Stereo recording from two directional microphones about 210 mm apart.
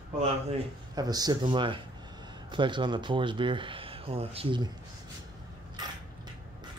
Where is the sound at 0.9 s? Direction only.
20° right (ahead or behind).